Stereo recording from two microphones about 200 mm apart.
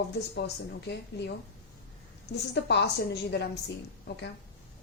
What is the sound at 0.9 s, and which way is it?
A woman's voice, 60° left (ahead or behind).